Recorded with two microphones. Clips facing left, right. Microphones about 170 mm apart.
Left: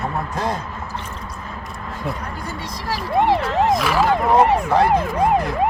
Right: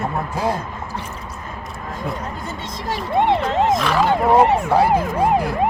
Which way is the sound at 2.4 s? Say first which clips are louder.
Right 1 dB; 25° right (ahead or behind).